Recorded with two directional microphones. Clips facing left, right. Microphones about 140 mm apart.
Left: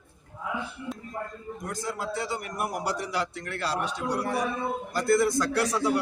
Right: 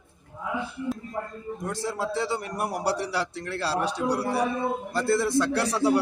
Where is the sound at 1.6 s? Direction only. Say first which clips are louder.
Right 3 dB; 30° right (ahead or behind).